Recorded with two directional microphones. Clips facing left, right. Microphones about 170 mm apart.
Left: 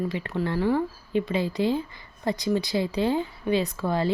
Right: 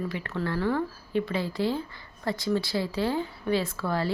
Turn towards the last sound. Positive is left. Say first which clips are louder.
# left 3 dB
turn(degrees=20)  # may be behind; listen again after turning